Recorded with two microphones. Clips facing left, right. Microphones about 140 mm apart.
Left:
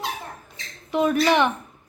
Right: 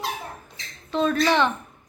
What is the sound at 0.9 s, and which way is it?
Speech, 15° left (ahead or behind).